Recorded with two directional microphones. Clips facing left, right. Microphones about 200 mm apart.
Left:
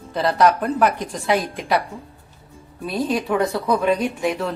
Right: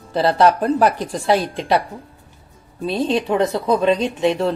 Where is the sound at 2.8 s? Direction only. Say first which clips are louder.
Right 3 dB; 25° right (ahead or behind).